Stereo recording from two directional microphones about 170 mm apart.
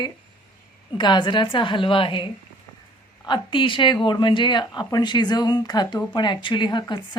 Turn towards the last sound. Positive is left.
turn(degrees=25)  # may be behind; listen again after turning